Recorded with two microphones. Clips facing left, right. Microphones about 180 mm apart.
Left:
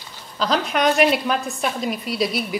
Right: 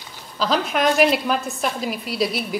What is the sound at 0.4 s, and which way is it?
A woman's voice, centre (ahead or behind).